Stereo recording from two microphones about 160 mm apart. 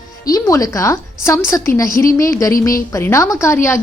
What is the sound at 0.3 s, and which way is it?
A woman's voice, 20° left (ahead or behind).